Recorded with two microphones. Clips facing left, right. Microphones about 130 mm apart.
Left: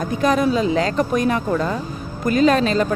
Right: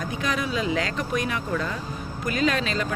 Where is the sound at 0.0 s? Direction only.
40° left (ahead or behind).